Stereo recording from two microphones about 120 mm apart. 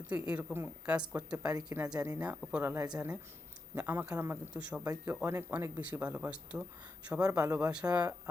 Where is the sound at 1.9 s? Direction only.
30° right (ahead or behind).